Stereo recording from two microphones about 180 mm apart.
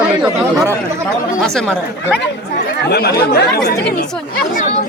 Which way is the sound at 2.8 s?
60° left (ahead or behind).